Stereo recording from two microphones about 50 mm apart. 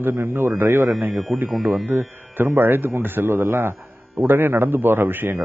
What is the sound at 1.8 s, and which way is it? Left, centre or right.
A man's voice, right.